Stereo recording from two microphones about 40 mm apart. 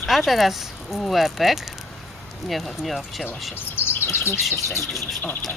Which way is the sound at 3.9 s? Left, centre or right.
Left.